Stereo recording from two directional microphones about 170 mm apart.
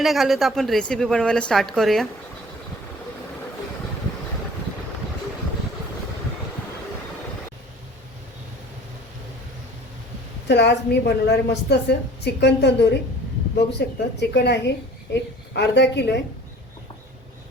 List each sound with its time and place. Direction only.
0.0 s a woman's voice: centre (ahead or behind)
10.5 s a woman's voice: 90° left